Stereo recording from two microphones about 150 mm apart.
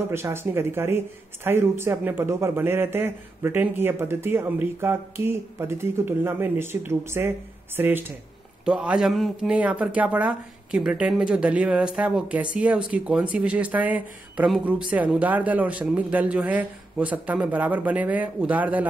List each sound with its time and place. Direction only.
0.1 s speech: 15° right (ahead or behind)